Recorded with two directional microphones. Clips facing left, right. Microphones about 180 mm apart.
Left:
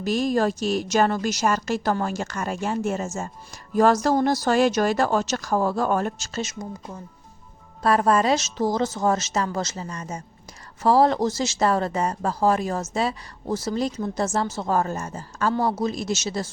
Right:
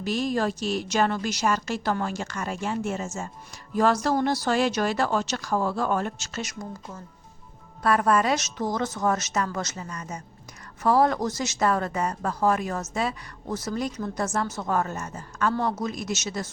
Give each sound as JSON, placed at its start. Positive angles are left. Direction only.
{"t": 0.0, "sound": "a woman's voice", "side_deg": 45}